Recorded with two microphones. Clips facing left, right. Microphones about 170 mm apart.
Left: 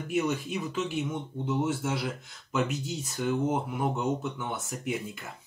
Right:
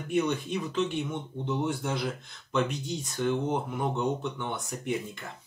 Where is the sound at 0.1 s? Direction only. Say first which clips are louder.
Right 1 dB; 5° left (ahead or behind).